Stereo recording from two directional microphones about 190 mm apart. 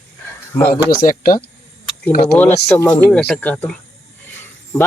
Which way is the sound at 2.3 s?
10° left (ahead or behind).